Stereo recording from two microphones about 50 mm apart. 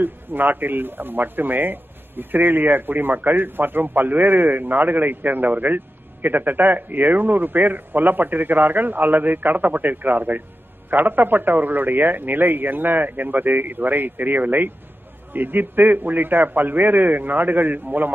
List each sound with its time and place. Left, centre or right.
0.0 s speech: right